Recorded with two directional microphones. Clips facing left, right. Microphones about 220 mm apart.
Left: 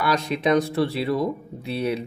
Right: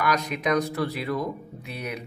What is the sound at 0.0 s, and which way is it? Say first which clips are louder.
Speech: left 3 dB; 30° left (ahead or behind).